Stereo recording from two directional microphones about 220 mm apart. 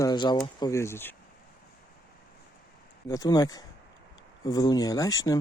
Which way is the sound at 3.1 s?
15° left (ahead or behind).